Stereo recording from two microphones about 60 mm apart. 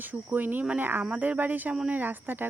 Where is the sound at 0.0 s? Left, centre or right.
Right.